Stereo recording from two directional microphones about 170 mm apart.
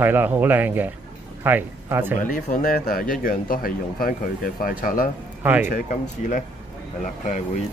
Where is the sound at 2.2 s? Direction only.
55° left (ahead or behind).